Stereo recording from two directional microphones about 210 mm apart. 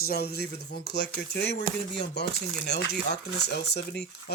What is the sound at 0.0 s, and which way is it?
Speech, 50° left (ahead or behind).